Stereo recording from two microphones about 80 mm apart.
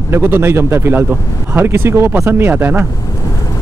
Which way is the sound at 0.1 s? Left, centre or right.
Right.